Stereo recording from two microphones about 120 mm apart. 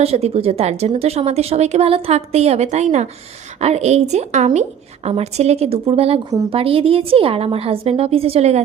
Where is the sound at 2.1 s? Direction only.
60° right (ahead or behind).